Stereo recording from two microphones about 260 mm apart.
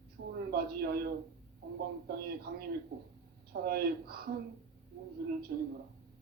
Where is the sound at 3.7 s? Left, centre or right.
Right.